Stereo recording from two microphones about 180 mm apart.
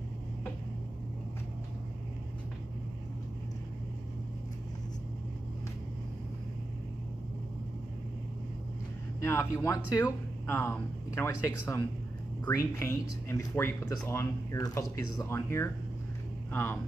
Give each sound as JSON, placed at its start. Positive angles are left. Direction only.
{"t": 9.2, "sound": "speech", "side_deg": 15}